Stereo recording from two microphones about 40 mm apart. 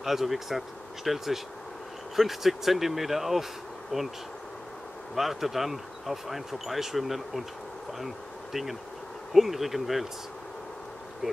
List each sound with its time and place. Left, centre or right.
0.0 s speech: centre
3.9 s speech: centre
5.1 s speech: centre
9.3 s speech: centre